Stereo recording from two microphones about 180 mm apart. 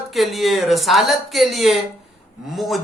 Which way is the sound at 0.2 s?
Centre (ahead or behind).